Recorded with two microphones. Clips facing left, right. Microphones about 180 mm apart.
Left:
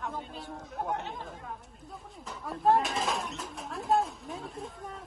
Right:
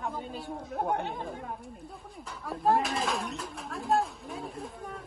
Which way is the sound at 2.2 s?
Centre (ahead or behind).